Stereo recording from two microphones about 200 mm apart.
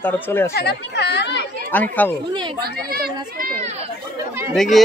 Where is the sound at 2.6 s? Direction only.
50° right (ahead or behind).